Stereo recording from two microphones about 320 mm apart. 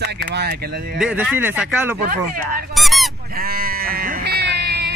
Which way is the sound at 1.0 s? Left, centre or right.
Centre.